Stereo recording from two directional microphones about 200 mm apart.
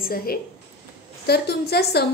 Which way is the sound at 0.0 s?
50° left (ahead or behind).